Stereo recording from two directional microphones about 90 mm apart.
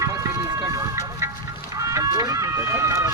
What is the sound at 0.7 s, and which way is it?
Vehicle, 35° right (ahead or behind).